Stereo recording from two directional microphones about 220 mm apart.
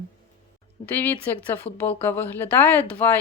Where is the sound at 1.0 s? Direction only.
10° left (ahead or behind).